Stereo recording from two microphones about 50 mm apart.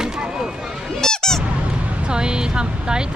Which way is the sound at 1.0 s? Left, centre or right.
Centre.